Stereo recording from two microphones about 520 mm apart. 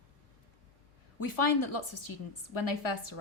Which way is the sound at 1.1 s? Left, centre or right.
Left.